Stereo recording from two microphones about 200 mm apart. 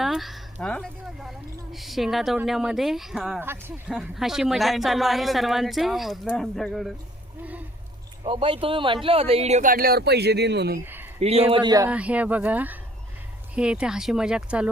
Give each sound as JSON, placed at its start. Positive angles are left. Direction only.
{"t": 0.0, "sound": "speech", "side_deg": 0}
{"t": 8.2, "sound": "speech", "side_deg": -25}
{"t": 11.2, "sound": "speech", "side_deg": -30}
{"t": 11.9, "sound": "speech", "side_deg": -5}